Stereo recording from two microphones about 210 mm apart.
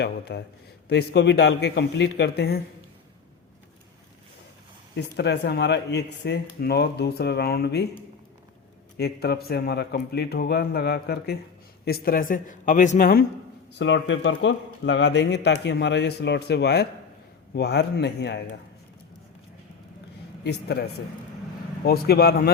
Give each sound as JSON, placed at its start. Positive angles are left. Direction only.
{"t": 0.0, "sound": "speech", "side_deg": 50}
{"t": 4.9, "sound": "speech", "side_deg": 55}
{"t": 9.0, "sound": "speech", "side_deg": 50}
{"t": 13.7, "sound": "a man's voice", "side_deg": 60}
{"t": 20.4, "sound": "speech", "side_deg": 50}
{"t": 21.8, "sound": "speech", "side_deg": 45}